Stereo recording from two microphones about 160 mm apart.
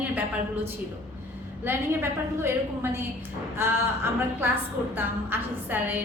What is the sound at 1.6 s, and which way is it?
A woman's voice, 15° right (ahead or behind).